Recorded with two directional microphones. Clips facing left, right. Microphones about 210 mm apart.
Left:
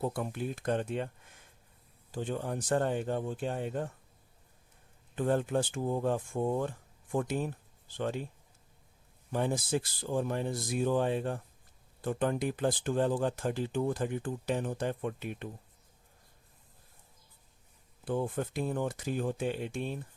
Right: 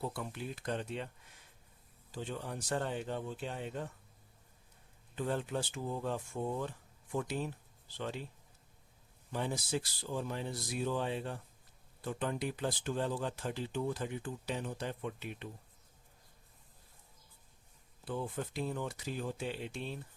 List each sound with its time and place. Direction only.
0.0 s speech: 50° left (ahead or behind)
2.1 s speech: 50° left (ahead or behind)
5.1 s speech: 50° left (ahead or behind)
9.3 s speech: 50° left (ahead or behind)
18.0 s speech: 50° left (ahead or behind)